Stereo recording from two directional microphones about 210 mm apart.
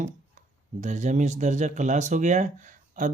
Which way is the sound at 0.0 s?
35° right (ahead or behind).